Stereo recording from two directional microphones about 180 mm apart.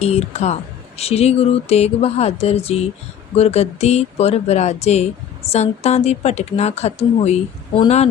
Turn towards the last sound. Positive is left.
turn(degrees=35)  # may be behind; listen again after turning